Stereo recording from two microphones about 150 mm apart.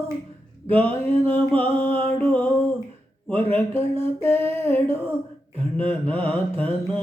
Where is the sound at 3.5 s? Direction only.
15° left (ahead or behind).